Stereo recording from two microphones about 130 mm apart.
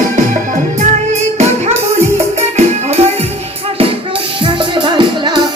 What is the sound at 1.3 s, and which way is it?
Music, 55° right (ahead or behind).